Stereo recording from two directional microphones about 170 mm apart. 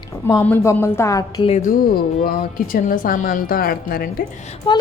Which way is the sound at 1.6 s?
55° left (ahead or behind).